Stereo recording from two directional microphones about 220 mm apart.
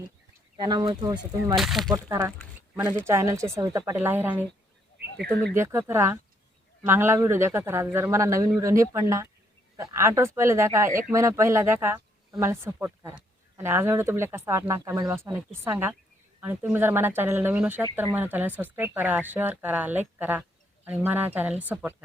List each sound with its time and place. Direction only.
0.5 s speech: 20° right (ahead or behind)
1.5 s speech: centre (ahead or behind)
1.9 s speech: 15° right (ahead or behind)
5.1 s speech: 5° left (ahead or behind)
5.5 s speech: 10° right (ahead or behind)